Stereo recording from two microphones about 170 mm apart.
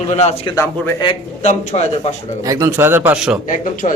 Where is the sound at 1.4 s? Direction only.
40° left (ahead or behind).